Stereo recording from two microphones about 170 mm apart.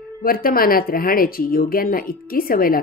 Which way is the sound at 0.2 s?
60° left (ahead or behind).